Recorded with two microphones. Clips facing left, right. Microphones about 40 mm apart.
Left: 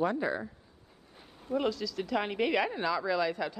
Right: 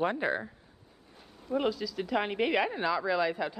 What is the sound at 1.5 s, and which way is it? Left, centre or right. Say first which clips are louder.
A woman's voice: right 1 dB; centre.